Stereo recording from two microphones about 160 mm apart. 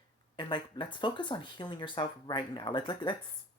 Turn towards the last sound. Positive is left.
turn(degrees=30)  # may be behind; listen again after turning